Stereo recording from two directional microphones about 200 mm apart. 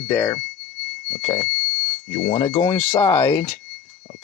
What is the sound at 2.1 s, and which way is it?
Speech, 25° left (ahead or behind).